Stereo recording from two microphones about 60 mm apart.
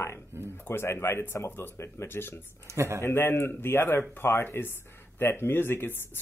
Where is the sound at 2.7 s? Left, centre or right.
Right.